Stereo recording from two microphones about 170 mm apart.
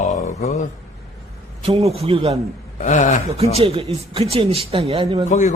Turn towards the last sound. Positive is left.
turn(degrees=45)  # may be behind; listen again after turning